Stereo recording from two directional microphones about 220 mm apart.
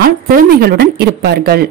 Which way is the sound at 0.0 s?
45° right (ahead or behind).